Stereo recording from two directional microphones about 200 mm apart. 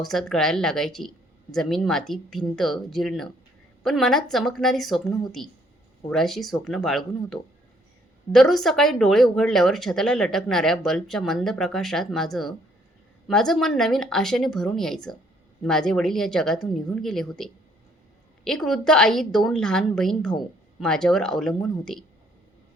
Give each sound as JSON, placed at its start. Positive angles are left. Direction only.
{"t": 0.0, "sound": "speech", "side_deg": 0}